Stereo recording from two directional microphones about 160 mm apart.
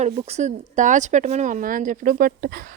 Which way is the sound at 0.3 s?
45° right (ahead or behind).